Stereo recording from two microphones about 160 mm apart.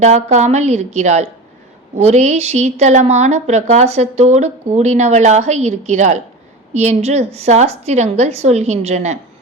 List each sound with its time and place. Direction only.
0.0 s a woman's voice: 45° right (ahead or behind)